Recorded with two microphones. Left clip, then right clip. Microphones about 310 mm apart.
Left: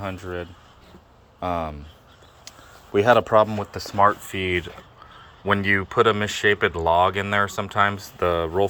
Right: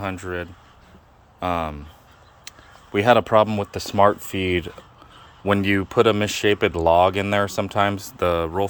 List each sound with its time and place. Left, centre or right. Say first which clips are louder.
0.0 s speech: right 3 dB; centre
2.9 s speech: even; centre
8.2 s speech: even; centre